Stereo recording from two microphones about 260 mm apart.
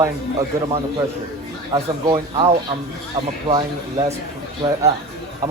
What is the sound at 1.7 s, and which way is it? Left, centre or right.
Speech, right.